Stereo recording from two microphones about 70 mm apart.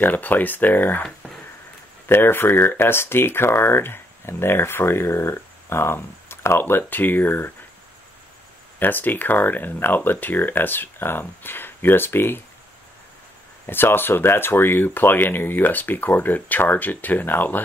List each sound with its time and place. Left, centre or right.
0.0 s speech: left
2.0 s speech: left
8.7 s speech: left
13.7 s speech: left